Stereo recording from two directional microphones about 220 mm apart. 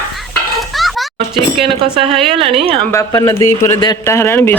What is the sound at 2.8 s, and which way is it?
A man's voice, 15° left (ahead or behind).